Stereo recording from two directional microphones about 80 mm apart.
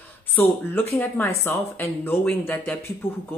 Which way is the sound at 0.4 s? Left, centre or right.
Left.